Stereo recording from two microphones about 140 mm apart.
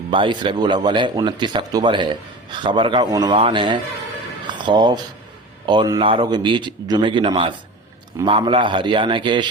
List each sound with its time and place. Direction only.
0.1 s speech: 35° right (ahead or behind)
3.3 s speech: 40° right (ahead or behind)